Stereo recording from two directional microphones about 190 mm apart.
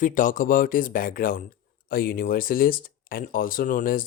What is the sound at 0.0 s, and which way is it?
Speech, 45° left (ahead or behind).